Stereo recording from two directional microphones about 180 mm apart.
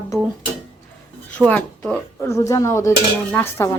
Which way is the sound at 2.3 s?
15° left (ahead or behind).